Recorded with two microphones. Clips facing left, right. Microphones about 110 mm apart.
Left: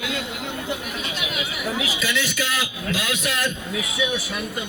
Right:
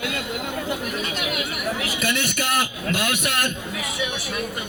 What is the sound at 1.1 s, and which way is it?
A man's voice, 50° right (ahead or behind).